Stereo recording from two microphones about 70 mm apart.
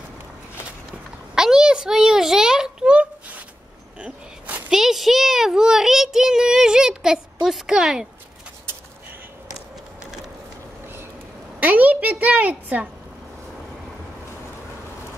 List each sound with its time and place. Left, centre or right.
1.3 s a sound: centre; by 4.6 s right
4.6 s a child's voice: centre
11.6 s a child's voice: right